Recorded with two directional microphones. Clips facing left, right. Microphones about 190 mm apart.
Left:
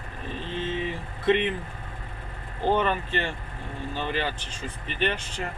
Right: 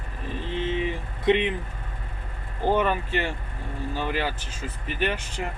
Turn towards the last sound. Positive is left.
turn(degrees=-10)  # may be behind; listen again after turning